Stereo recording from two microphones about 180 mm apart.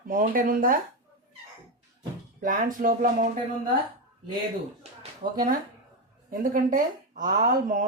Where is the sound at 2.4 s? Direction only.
50° right (ahead or behind).